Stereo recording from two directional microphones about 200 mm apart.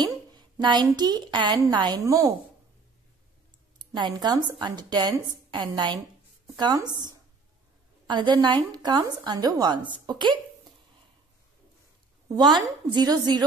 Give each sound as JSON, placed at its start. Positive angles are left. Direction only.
{"t": 0.0, "sound": "a woman's voice", "side_deg": -20}
{"t": 3.9, "sound": "a woman's voice", "side_deg": -20}
{"t": 12.6, "sound": "a woman's voice", "side_deg": -20}